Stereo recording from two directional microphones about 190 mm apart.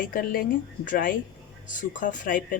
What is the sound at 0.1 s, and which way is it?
Speech, 50° left (ahead or behind).